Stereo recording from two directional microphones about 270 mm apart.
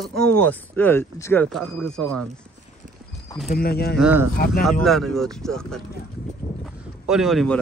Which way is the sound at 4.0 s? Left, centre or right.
Centre.